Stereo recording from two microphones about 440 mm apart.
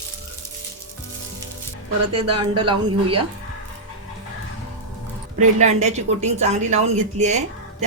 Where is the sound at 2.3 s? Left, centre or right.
Centre.